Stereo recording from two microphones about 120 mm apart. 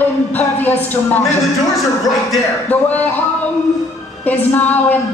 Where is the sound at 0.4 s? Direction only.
15° left (ahead or behind).